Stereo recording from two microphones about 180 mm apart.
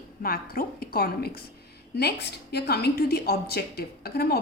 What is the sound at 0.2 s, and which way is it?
A woman's voice, 55° left (ahead or behind).